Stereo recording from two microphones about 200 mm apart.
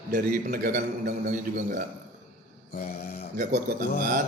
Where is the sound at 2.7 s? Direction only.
45° left (ahead or behind).